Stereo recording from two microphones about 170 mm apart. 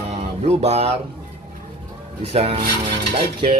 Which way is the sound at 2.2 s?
35° right (ahead or behind).